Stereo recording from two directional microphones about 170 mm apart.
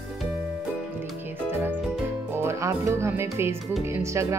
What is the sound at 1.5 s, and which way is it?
Music, 10° right (ahead or behind).